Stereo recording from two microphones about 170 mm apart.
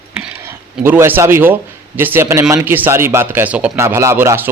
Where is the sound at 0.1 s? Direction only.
5° right (ahead or behind).